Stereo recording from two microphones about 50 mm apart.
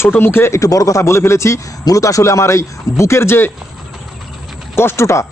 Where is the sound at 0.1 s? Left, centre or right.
Left.